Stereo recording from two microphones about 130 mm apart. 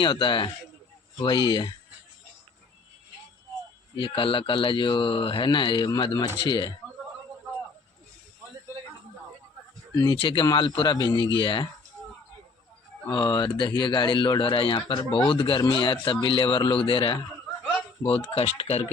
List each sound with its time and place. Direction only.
0.0 s speech: 40° left (ahead or behind)
3.9 s speech: 40° left (ahead or behind)
9.9 s speech: 35° left (ahead or behind)
13.1 s speech: 35° left (ahead or behind)
18.3 s speech: 50° left (ahead or behind)